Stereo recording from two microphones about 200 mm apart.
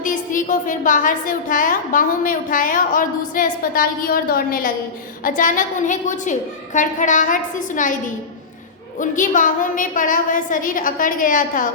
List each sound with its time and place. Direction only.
0.0 s a woman's voice: 40° left (ahead or behind)
9.0 s a woman's voice: 40° left (ahead or behind)